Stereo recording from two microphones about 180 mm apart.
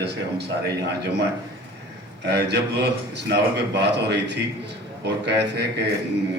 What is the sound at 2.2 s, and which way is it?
A man's voice, 70° right (ahead or behind).